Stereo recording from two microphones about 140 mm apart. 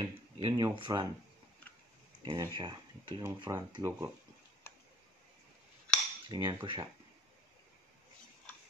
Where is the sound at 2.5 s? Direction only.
30° right (ahead or behind).